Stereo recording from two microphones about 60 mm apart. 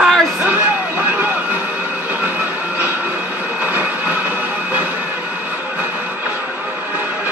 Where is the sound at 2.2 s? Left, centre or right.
Right.